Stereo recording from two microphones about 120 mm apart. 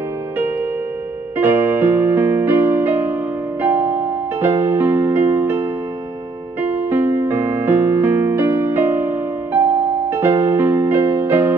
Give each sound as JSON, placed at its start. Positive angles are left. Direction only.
{"t": 1.4, "sound": "music", "side_deg": -15}